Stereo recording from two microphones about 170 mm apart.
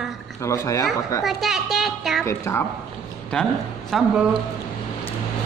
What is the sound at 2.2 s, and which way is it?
Speech, 15° left (ahead or behind).